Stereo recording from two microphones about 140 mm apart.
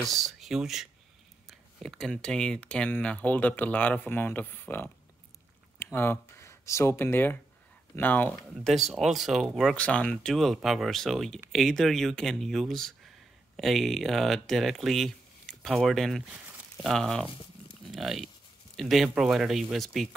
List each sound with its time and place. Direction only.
0.0 s speech: centre (ahead or behind)
8.6 s speech: centre (ahead or behind)
16.3 s a sound: 10° right (ahead or behind)
16.7 s speech: centre (ahead or behind)